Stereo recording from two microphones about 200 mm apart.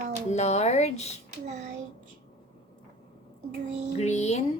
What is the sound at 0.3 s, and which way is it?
Speech, 35° left (ahead or behind).